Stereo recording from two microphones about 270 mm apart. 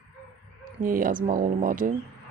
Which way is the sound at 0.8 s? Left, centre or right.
Right.